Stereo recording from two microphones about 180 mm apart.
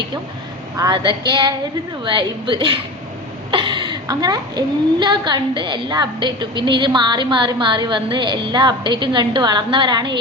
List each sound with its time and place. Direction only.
0.8 s a woman's voice: 25° right (ahead or behind)